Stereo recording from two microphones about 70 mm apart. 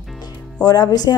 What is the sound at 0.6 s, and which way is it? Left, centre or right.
Speech, left.